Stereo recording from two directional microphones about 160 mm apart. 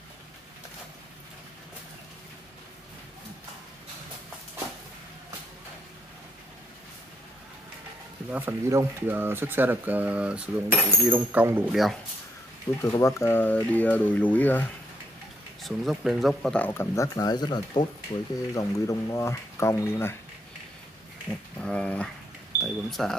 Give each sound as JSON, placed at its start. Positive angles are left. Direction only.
{"t": 8.3, "sound": "speech", "side_deg": -10}
{"t": 11.7, "sound": "speech", "side_deg": 0}
{"t": 12.7, "sound": "speech", "side_deg": 15}
{"t": 15.6, "sound": "speech", "side_deg": 0}
{"t": 21.5, "sound": "speech", "side_deg": 5}